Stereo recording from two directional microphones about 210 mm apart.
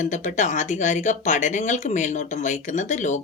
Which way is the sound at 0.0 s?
35° left (ahead or behind).